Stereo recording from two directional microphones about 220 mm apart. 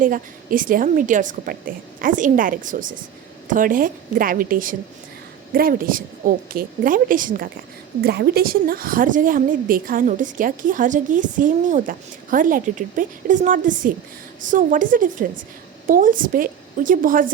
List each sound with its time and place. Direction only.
0.0 s a woman's voice: 40° right (ahead or behind)